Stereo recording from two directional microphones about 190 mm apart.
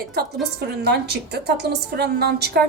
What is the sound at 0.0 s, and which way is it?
A woman's voice, 55° right (ahead or behind).